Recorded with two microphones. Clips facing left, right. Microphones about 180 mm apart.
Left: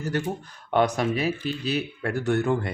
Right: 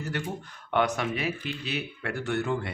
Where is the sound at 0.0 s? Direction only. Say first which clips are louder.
Left 5 dB; 40° left (ahead or behind).